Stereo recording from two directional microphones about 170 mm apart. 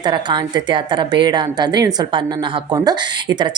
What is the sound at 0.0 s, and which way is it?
Speech, 25° right (ahead or behind).